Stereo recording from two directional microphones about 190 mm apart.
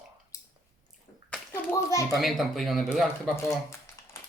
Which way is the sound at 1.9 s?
15° left (ahead or behind).